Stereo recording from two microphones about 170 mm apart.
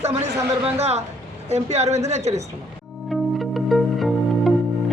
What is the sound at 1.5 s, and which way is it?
Speech, 40° right (ahead or behind).